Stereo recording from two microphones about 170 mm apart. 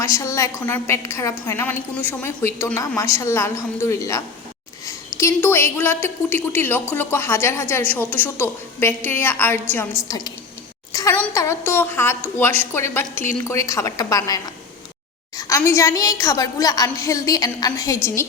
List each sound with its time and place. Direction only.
0.0 s a woman's voice: 20° left (ahead or behind)
10.9 s a sound: 20° left (ahead or behind)
11.3 s a woman's voice: 15° left (ahead or behind)